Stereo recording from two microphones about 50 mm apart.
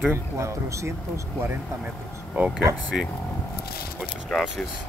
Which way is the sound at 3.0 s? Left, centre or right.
Right.